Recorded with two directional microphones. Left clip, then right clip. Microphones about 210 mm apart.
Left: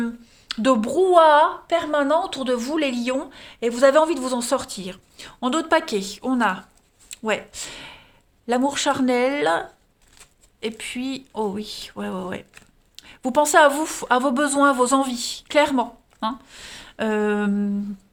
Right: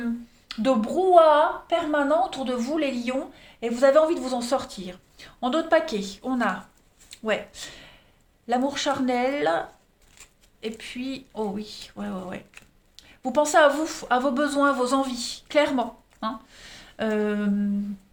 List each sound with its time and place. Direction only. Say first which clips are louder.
0.0 s a woman's voice: left 2 dB; 50° left (ahead or behind)